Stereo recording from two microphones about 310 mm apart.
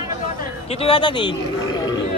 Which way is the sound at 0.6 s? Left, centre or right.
Centre.